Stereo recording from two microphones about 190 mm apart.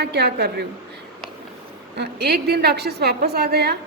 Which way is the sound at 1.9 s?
60° right (ahead or behind).